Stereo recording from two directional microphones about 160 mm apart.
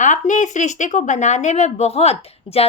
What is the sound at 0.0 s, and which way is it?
Speech, 50° left (ahead or behind).